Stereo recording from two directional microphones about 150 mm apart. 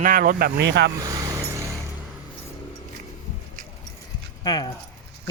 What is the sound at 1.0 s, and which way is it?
Vehicle, 25° right (ahead or behind).